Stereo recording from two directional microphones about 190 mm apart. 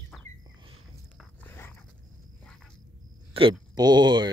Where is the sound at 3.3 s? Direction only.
25° right (ahead or behind).